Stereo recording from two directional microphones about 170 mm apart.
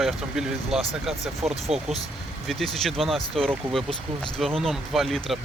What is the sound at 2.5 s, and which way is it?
Speech, centre (ahead or behind).